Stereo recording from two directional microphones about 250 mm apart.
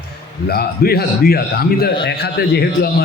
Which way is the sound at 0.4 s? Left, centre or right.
Left.